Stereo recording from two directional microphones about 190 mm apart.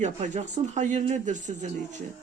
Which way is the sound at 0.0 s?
35° right (ahead or behind).